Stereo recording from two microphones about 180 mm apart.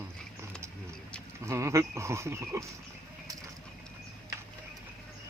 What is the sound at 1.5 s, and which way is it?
Speech, 15° right (ahead or behind).